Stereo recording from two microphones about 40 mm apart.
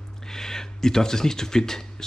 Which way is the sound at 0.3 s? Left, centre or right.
Centre.